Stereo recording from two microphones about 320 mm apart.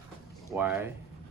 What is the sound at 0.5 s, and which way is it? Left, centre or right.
Speech, centre.